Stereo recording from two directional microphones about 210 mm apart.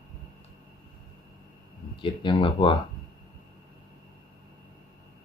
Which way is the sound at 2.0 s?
20° left (ahead or behind).